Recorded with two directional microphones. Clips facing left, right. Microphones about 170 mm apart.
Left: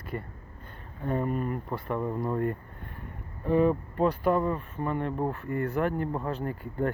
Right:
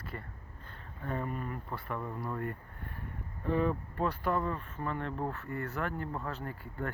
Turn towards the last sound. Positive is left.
turn(degrees=20)  # may be behind; listen again after turning